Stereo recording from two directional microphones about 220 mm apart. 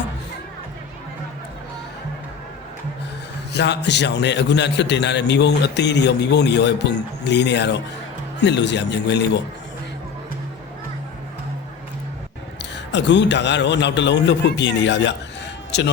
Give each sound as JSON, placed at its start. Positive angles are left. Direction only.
{"t": 3.5, "sound": "a man's voice", "side_deg": 50}
{"t": 12.7, "sound": "a man's voice", "side_deg": 55}